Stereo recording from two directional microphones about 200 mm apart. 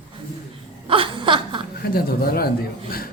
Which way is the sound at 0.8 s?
25° right (ahead or behind).